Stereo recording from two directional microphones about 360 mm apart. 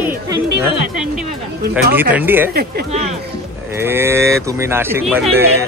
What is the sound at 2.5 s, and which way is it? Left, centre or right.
Speech, right.